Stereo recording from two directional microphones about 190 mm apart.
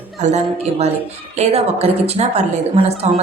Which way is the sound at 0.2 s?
35° right (ahead or behind).